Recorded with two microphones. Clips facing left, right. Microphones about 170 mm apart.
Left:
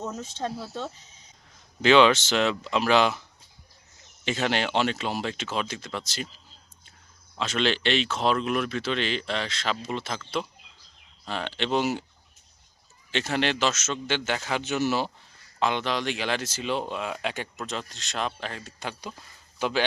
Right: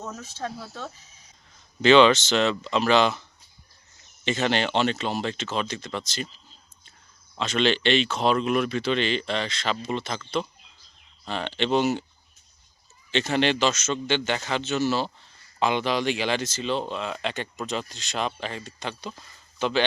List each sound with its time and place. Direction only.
0.0 s speech: 20° left (ahead or behind)
1.8 s speech: 5° left (ahead or behind)
4.3 s speech: 5° left (ahead or behind)
7.3 s speech: 5° left (ahead or behind)
11.3 s speech: 5° left (ahead or behind)
13.1 s speech: 5° left (ahead or behind)
14.6 s speech: 15° left (ahead or behind)
15.5 s speech: 5° right (ahead or behind)